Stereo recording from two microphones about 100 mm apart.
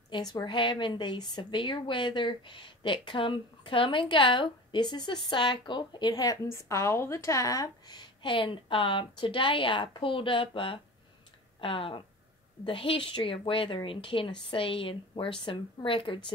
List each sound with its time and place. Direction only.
0.1 s a woman's voice: 45° left (ahead or behind)